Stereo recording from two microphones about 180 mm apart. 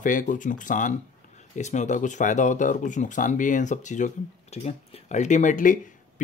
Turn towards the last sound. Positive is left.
turn(degrees=45)  # may be behind; listen again after turning